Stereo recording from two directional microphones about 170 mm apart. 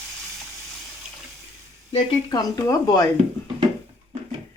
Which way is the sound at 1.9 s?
30° left (ahead or behind).